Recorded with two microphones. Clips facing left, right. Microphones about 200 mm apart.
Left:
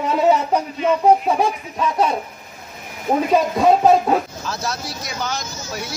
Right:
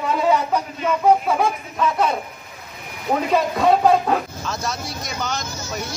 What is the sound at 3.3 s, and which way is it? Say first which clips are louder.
Speech: left 2 dB; 15° left (ahead or behind).